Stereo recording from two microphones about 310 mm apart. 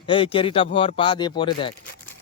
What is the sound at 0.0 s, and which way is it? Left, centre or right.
Speech, centre.